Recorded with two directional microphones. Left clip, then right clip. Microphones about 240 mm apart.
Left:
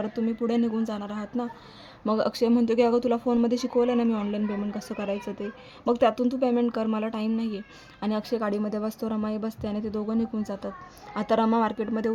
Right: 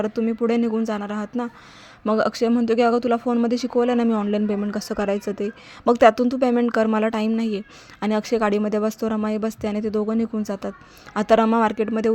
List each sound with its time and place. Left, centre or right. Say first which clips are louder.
0.0 s speech: right 6 dB; right